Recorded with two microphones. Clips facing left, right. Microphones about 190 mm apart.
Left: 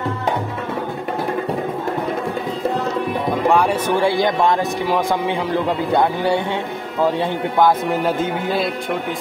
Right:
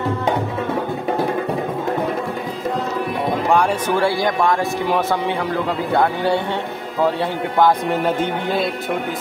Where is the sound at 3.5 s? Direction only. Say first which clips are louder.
Left 1 dB; centre (ahead or behind).